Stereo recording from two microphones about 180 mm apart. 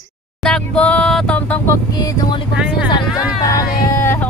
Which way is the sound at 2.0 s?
25° left (ahead or behind).